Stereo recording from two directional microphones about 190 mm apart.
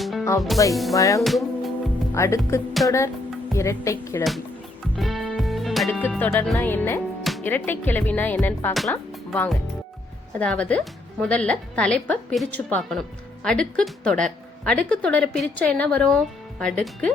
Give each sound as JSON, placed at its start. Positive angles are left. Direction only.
{"t": 0.0, "sound": "music", "side_deg": 0}
{"t": 0.3, "sound": "speech", "side_deg": 0}
{"t": 0.9, "sound": "speech", "side_deg": 15}
{"t": 1.2, "sound": "music", "side_deg": 0}
{"t": 2.1, "sound": "speech", "side_deg": 15}
{"t": 4.9, "sound": "music", "side_deg": 0}
{"t": 6.0, "sound": "speech", "side_deg": 10}